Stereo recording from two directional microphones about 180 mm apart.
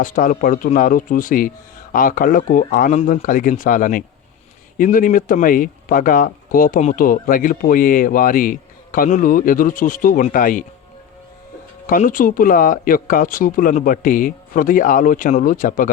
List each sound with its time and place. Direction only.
0.0 s speech: 50° left (ahead or behind)
11.9 s speech: 50° left (ahead or behind)